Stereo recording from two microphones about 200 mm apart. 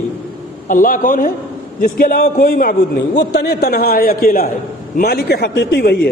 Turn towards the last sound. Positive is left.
turn(degrees=55)  # may be behind; listen again after turning